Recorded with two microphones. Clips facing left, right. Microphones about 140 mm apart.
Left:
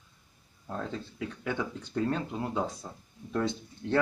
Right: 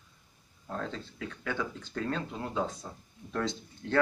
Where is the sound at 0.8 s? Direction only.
10° left (ahead or behind).